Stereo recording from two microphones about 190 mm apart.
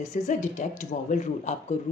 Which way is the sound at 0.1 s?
40° left (ahead or behind).